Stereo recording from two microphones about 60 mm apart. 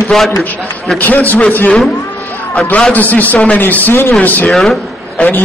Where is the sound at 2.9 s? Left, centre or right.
Left.